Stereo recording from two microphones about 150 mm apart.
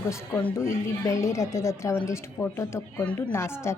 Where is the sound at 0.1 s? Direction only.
15° left (ahead or behind).